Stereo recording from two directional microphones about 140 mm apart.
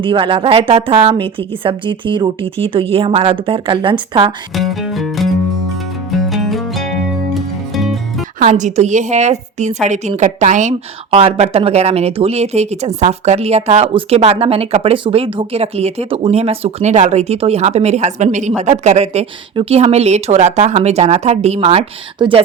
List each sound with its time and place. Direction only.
0.0 s a woman's voice: 35° right (ahead or behind)
4.5 s music: centre (ahead or behind)
8.4 s speech: 60° right (ahead or behind)